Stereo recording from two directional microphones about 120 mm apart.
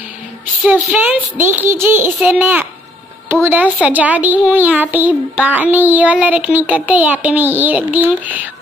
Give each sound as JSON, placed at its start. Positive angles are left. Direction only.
{"t": 0.9, "sound": "a child's voice", "side_deg": -15}